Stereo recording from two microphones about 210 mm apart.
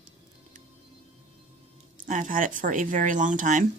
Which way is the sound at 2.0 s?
40° right (ahead or behind).